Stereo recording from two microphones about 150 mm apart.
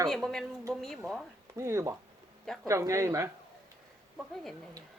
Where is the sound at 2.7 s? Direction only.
20° right (ahead or behind).